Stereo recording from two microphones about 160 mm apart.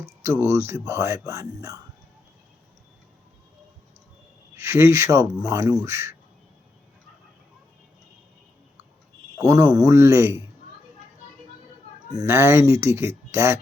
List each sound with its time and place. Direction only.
0.2 s speech: 15° right (ahead or behind)
4.5 s speech: 15° right (ahead or behind)
9.4 s speech: 20° right (ahead or behind)
12.1 s speech: 15° right (ahead or behind)